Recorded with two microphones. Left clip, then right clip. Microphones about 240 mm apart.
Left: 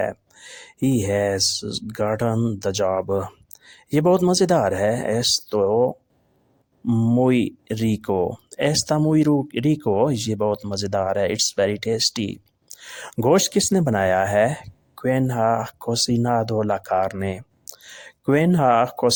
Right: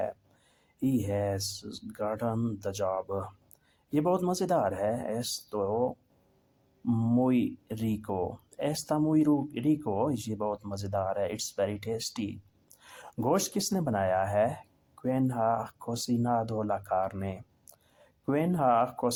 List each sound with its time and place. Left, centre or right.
0.0 s speech: left